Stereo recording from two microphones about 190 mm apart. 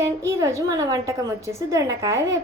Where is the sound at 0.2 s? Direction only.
15° right (ahead or behind).